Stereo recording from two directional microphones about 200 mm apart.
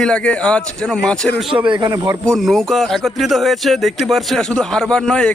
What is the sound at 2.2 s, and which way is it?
Speech, centre (ahead or behind).